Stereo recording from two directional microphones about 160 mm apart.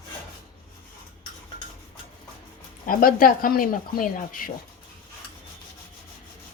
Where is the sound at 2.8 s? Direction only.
60° left (ahead or behind).